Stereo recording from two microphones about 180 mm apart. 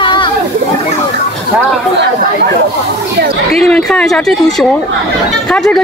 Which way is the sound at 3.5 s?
Centre (ahead or behind).